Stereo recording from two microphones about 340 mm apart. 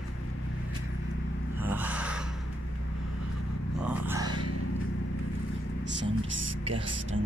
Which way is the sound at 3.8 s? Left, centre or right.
Centre.